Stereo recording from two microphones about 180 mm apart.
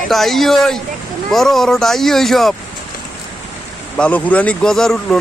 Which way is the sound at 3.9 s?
5° left (ahead or behind).